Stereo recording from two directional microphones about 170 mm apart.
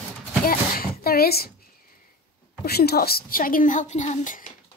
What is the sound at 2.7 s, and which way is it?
Speech, 65° left (ahead or behind).